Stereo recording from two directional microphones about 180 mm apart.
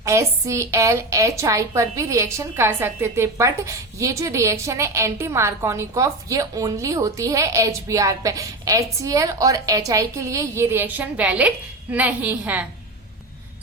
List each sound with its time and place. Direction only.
0.0 s a woman's voice: 15° right (ahead or behind)